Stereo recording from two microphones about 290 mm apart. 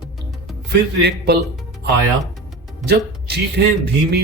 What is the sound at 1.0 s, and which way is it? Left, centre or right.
Speech, right.